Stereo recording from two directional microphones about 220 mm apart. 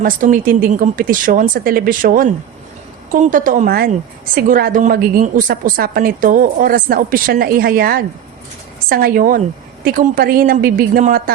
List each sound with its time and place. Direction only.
0.0 s a woman's voice: 40° right (ahead or behind)